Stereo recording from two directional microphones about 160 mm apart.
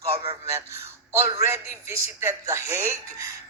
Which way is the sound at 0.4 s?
20° right (ahead or behind).